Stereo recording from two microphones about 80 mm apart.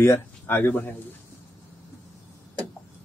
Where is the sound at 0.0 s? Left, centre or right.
Left.